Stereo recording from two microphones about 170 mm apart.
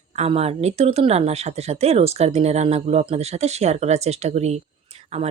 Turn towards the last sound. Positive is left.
turn(degrees=-40)  # may be behind; listen again after turning